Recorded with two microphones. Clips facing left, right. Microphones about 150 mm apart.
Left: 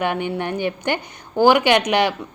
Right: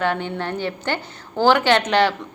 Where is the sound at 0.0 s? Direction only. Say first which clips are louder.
Left 1 dB; 15° left (ahead or behind).